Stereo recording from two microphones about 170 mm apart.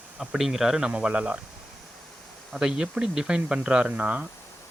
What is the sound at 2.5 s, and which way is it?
Speech, 5° right (ahead or behind).